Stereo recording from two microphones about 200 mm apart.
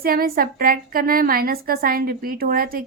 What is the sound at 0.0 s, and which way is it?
A woman's voice, 45° right (ahead or behind).